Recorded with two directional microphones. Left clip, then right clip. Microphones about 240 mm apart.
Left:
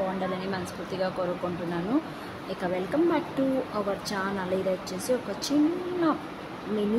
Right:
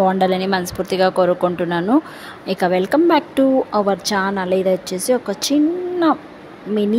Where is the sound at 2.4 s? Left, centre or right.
Right.